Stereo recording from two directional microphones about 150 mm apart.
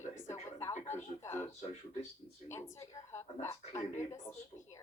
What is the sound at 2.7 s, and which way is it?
A woman's voice, 20° left (ahead or behind).